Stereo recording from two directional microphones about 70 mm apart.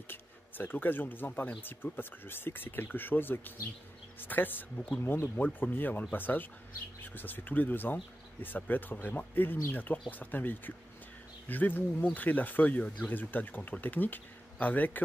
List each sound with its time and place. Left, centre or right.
0.1 s speech: left
5.0 s speech: left